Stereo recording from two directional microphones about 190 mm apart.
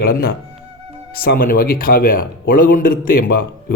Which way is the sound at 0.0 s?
50° left (ahead or behind).